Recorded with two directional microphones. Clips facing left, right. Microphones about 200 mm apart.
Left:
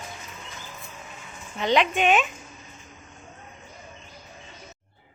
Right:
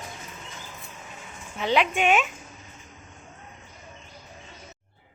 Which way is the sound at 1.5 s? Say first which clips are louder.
Left 1 dB; 5° right (ahead or behind).